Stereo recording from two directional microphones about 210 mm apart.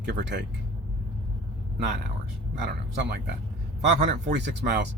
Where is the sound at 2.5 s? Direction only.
55° right (ahead or behind).